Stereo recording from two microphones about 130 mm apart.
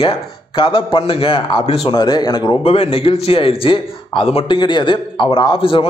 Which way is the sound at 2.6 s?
50° left (ahead or behind).